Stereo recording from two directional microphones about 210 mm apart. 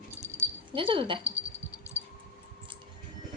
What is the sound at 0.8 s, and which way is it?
Speech, 25° right (ahead or behind).